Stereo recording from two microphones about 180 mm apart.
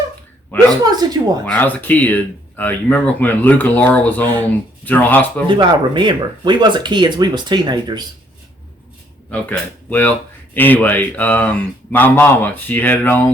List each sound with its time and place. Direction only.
0.5 s speech: 10° left (ahead or behind)
0.9 s speech: 20° right (ahead or behind)
1.5 s speech: 10° left (ahead or behind)
5.5 s speech: 25° right (ahead or behind)
9.3 s speech: 10° left (ahead or behind)